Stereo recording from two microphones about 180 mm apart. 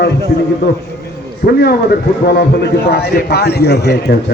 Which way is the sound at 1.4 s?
60° left (ahead or behind).